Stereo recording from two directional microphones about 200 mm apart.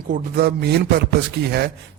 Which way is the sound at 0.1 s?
50° right (ahead or behind).